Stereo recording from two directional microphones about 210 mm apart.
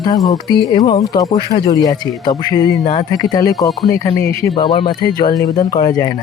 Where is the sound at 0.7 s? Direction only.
20° left (ahead or behind).